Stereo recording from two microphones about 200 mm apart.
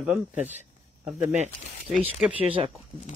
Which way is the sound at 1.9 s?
5° right (ahead or behind).